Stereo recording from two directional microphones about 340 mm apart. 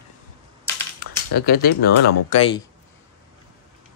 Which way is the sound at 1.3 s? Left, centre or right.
Left.